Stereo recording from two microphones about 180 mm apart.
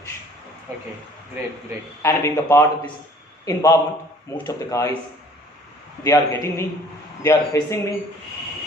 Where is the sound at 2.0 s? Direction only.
15° left (ahead or behind).